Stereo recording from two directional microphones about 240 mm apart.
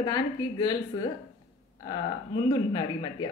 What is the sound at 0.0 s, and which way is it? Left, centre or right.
A woman's voice, centre.